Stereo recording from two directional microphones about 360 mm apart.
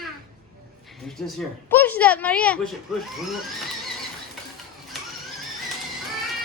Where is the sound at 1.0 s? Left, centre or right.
Centre.